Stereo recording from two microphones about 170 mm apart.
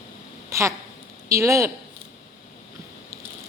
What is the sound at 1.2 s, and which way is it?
Speech, 15° right (ahead or behind).